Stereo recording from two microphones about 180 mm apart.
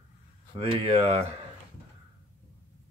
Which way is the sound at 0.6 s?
30° right (ahead or behind).